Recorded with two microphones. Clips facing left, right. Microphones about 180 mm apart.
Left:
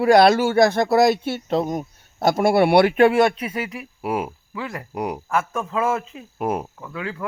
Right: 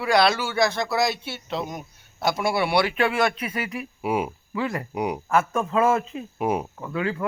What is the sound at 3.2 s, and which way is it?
Speech, 30° left (ahead or behind).